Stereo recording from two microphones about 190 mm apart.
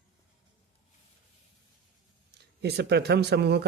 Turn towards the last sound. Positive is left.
turn(degrees=-60)  # may be behind; listen again after turning